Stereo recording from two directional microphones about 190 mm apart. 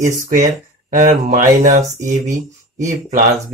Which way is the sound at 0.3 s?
40° right (ahead or behind).